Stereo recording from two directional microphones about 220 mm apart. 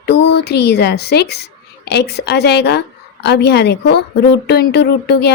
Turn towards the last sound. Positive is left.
turn(degrees=50)  # may be behind; listen again after turning